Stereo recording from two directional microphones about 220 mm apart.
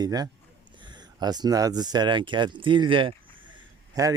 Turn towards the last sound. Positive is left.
turn(degrees=-15)  # may be behind; listen again after turning